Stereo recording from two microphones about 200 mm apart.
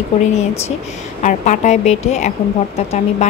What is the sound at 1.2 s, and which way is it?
Speech, 35° left (ahead or behind).